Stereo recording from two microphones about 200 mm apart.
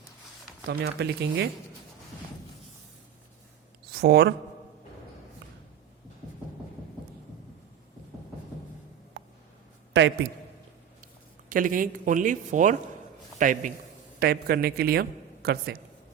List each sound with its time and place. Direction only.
0.7 s speech: 55° right (ahead or behind)
3.9 s speech: 55° right (ahead or behind)
9.9 s a man's voice: 60° right (ahead or behind)
11.4 s speech: 45° right (ahead or behind)
14.2 s a man's voice: 50° right (ahead or behind)